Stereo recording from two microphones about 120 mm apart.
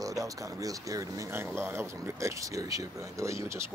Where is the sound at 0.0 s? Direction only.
30° right (ahead or behind).